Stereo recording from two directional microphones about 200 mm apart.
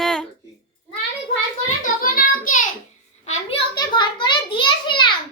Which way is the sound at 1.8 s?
45° left (ahead or behind).